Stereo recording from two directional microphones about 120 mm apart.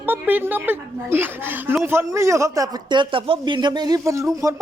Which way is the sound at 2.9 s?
45° right (ahead or behind).